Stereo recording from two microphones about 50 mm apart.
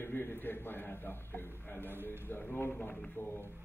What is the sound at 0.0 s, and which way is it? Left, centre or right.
A man's voice, left.